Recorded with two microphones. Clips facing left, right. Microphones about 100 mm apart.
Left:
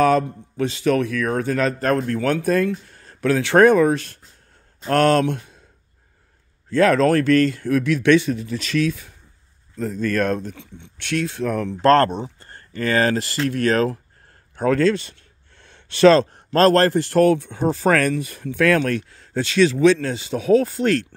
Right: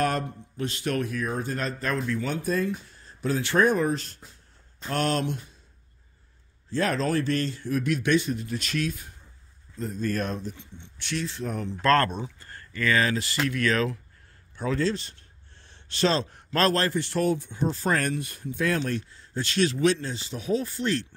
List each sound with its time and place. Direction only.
0.6 s speech: 90° left
1.8 s speech: 55° left (ahead or behind); by 4.2 s 75° left (ahead or behind)
4.8 s speech: 65° left (ahead or behind)
6.7 s a man's voice: 75° left (ahead or behind)
9.8 s speech: 85° left; by 11.7 s 70° left (ahead or behind)
11.8 s speech: 30° left (ahead or behind)
14.5 s a sound: 55° left (ahead or behind)
16.5 s speech: 45° left (ahead or behind)
17.2 s speech: 75° left (ahead or behind)